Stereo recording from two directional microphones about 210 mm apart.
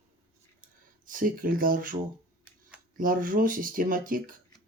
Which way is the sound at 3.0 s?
40° right (ahead or behind).